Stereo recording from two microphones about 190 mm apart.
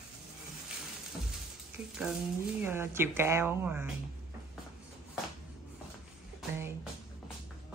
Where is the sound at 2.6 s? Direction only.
10° right (ahead or behind).